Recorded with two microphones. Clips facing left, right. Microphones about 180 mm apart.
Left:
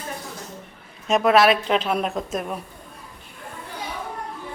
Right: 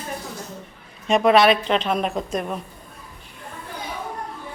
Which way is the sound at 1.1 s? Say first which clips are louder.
Right 1 dB; centre (ahead or behind).